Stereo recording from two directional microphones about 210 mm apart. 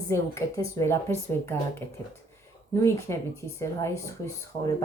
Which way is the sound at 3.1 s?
15° left (ahead or behind).